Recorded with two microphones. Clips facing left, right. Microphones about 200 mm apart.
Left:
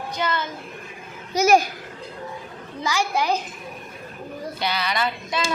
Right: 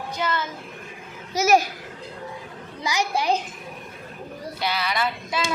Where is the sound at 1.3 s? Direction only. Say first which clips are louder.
Left 2 dB; 5° right (ahead or behind).